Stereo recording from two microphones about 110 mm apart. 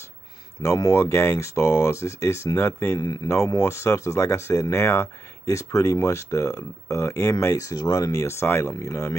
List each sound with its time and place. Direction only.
0.6 s speech: 30° left (ahead or behind)